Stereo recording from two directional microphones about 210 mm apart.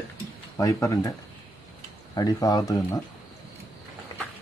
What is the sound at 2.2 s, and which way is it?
Speech, 15° left (ahead or behind).